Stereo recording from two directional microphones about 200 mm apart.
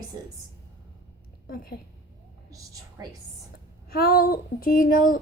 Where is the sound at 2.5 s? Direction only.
15° right (ahead or behind).